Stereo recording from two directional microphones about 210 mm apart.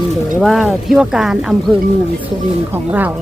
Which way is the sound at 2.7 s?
10° right (ahead or behind).